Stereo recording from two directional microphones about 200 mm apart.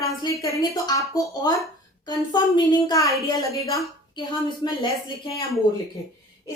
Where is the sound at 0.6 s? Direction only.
20° left (ahead or behind).